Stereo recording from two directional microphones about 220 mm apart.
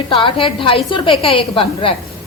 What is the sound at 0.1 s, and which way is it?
A woman's voice, 25° left (ahead or behind).